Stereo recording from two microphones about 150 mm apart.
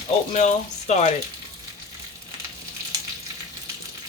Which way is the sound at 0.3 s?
50° left (ahead or behind).